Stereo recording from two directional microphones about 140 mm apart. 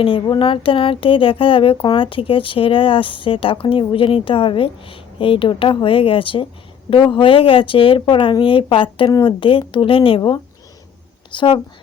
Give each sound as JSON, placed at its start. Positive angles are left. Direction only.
{"t": 0.0, "sound": "speech", "side_deg": 35}